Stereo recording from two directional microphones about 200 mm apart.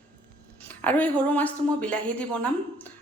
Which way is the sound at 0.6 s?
10° left (ahead or behind).